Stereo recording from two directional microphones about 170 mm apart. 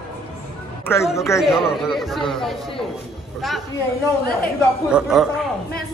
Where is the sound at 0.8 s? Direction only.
15° left (ahead or behind).